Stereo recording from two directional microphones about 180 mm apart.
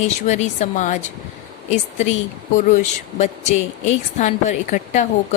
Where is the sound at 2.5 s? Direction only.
45° left (ahead or behind).